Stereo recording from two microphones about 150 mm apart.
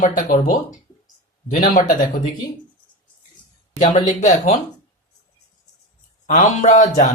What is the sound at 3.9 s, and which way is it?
Speech, 55° left (ahead or behind).